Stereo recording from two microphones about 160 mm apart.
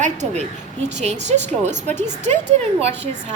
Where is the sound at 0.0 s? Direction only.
50° right (ahead or behind).